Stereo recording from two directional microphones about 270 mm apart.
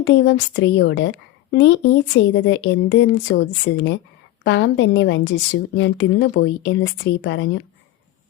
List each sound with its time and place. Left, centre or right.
0.0 s a woman's voice: left